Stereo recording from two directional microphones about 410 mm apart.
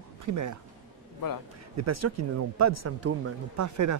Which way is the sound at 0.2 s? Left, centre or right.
Right.